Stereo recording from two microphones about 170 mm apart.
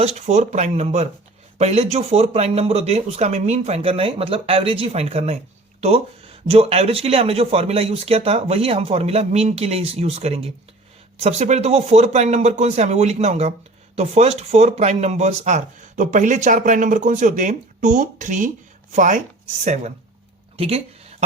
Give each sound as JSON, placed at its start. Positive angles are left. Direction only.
{"t": 0.0, "sound": "speech", "side_deg": -40}
{"t": 6.5, "sound": "speech", "side_deg": -35}